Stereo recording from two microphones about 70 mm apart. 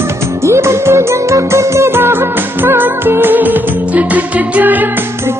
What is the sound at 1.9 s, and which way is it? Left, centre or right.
Music, right.